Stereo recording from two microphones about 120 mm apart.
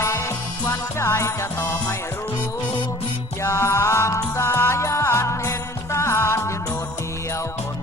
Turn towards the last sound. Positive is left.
turn(degrees=25)  # may be behind; listen again after turning